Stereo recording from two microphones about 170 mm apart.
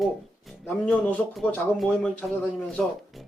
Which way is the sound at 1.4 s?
5° left (ahead or behind).